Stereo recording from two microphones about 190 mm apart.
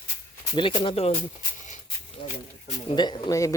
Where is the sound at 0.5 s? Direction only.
30° left (ahead or behind).